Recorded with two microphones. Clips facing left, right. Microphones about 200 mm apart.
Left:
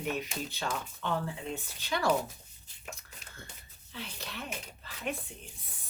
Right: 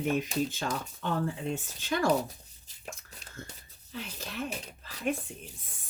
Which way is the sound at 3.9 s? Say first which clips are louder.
Right 5 dB; 40° right (ahead or behind).